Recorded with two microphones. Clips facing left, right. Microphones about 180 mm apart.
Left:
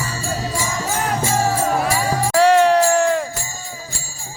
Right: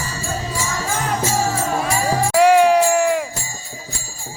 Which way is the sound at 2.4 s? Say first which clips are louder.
Right 1 dB; 10° right (ahead or behind).